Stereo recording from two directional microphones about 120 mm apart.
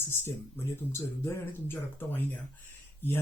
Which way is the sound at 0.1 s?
20° left (ahead or behind).